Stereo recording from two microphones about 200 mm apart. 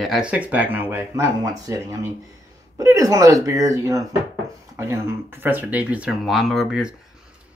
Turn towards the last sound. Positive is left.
turn(degrees=0)  # may be behind; listen again after turning